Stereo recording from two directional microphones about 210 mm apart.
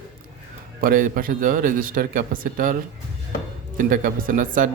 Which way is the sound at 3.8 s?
40° right (ahead or behind).